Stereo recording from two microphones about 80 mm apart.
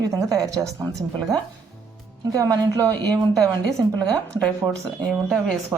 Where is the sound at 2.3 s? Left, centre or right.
Right.